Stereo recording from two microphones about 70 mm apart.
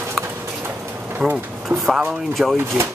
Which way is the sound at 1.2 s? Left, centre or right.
Centre.